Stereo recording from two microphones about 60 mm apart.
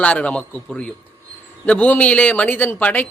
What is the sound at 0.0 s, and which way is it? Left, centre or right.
Speech, left.